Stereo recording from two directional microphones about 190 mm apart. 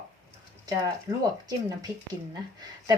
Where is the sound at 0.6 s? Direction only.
20° right (ahead or behind).